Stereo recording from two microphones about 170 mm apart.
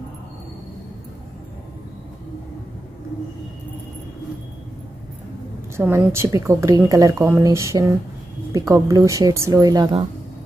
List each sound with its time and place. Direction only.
5.9 s a woman's voice: 15° right (ahead or behind)